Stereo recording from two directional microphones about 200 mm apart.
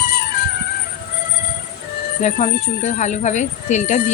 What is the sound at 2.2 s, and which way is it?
Speech, 35° left (ahead or behind).